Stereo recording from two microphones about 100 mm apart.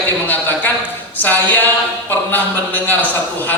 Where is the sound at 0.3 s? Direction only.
20° left (ahead or behind).